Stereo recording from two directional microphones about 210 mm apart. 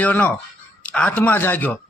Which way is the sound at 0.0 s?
10° left (ahead or behind).